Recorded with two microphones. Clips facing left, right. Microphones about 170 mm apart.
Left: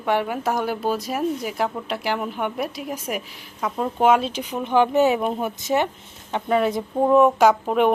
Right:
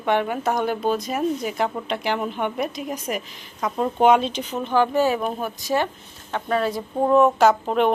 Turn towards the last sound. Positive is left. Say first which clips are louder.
# left 1 dB
turn(degrees=10)  # may be behind; listen again after turning